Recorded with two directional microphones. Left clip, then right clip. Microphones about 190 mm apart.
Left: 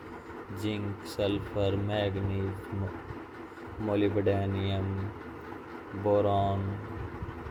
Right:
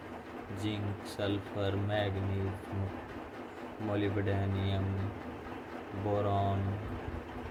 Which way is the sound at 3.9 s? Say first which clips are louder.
Left 7 dB; 20° left (ahead or behind).